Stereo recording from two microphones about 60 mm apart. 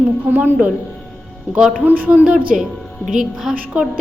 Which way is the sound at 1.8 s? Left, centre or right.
Right.